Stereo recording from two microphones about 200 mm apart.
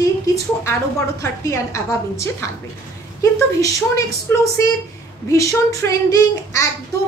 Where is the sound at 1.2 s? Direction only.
15° left (ahead or behind).